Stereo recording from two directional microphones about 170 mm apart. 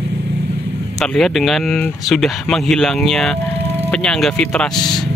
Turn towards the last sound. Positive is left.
turn(degrees=0)  # may be behind; listen again after turning